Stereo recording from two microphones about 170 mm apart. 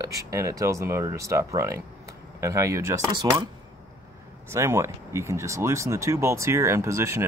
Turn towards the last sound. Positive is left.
turn(degrees=-15)  # may be behind; listen again after turning